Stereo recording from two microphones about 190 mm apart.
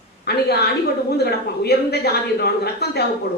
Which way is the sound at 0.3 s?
60° left (ahead or behind).